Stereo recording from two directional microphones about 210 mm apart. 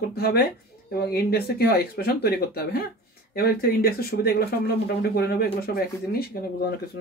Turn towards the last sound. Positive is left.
turn(degrees=50)  # may be behind; listen again after turning